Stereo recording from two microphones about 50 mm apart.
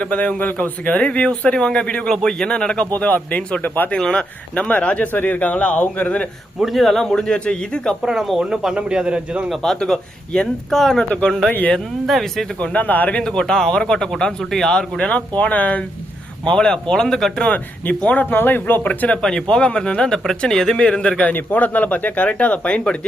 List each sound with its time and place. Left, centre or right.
0.0 s speech: left
2.9 s speech: left
3.9 s speech: centre
4.7 s speech: left
5.1 s speech: left
6.7 s speech: centre
8.0 s speech: centre
9.8 s a man's voice: centre
12.5 s speech: left
15.4 s speech: left
16.5 s speech: centre
18.0 s speech: left
19.2 s speech: centre
21.3 s speech: left